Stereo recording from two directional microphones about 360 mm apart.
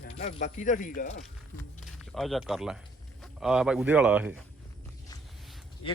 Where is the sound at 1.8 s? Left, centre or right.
Centre.